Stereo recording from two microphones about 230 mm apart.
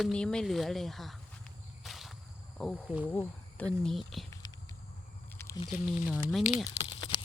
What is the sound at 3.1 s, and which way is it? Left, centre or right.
Speech, centre.